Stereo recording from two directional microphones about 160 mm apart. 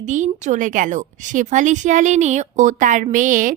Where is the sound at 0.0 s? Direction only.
50° right (ahead or behind).